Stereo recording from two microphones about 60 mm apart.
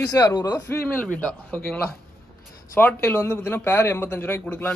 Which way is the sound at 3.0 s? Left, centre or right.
Left.